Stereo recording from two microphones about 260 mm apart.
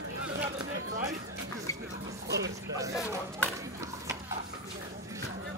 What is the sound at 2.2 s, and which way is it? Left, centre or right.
Speech, right.